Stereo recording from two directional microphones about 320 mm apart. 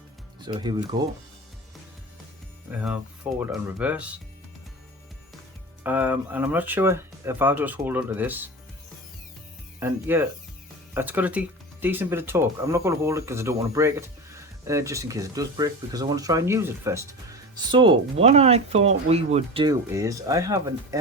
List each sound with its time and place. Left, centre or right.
0.4 s speech: centre
2.7 s speech: centre
5.8 s speech: centre
9.8 s speech: centre